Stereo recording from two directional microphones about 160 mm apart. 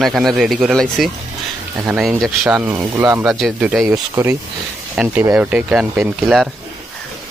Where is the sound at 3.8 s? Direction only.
15° right (ahead or behind); by 6.5 s centre (ahead or behind).